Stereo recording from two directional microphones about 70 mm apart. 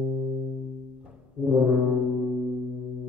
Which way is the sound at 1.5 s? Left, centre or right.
Centre.